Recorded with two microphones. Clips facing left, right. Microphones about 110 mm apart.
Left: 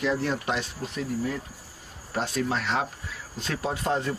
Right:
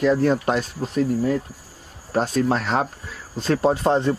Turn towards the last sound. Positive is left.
turn(degrees=-30)  # may be behind; listen again after turning